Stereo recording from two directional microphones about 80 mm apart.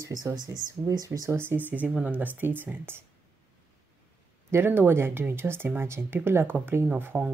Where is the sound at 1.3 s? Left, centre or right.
Right.